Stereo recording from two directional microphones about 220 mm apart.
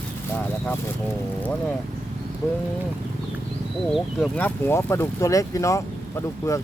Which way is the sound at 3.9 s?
Centre (ahead or behind).